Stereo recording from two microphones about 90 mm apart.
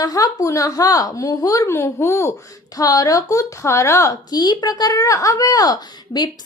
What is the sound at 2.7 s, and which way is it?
A woman's voice, 40° left (ahead or behind).